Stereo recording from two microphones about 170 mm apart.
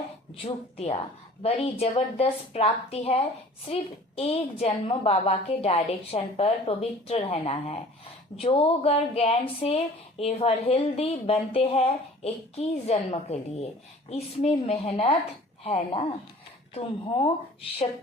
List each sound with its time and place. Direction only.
0.4 s speech: 35° left (ahead or behind)